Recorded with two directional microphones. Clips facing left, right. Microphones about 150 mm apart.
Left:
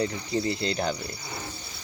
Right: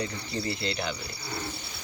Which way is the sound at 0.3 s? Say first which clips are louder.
Left 5 dB; 20° left (ahead or behind).